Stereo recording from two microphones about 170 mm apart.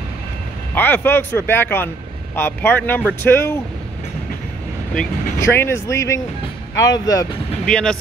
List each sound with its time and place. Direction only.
0.7 s speech: 10° left (ahead or behind)
5.4 s speech: 15° left (ahead or behind)
7.6 s speech: 5° left (ahead or behind)